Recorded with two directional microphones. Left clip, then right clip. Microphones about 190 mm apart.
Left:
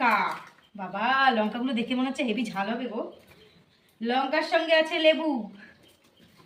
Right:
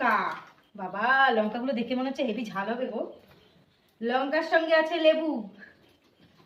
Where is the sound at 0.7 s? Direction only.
25° right (ahead or behind).